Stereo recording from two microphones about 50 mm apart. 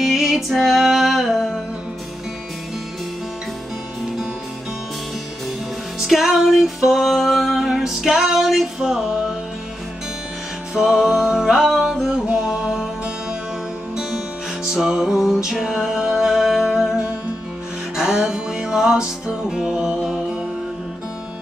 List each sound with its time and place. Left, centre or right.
0.0 s music: centre
0.7 s a sound: centre
5.9 s music: centre
10.7 s music: centre
14.7 s music: centre